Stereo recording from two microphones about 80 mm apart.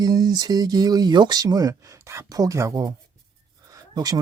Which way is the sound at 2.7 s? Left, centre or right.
Right.